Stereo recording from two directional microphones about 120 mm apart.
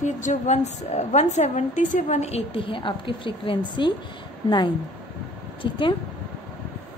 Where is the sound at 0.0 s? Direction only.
85° left; by 5.9 s 45° left (ahead or behind).